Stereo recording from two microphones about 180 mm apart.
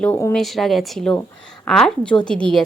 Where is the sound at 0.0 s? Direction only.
10° left (ahead or behind).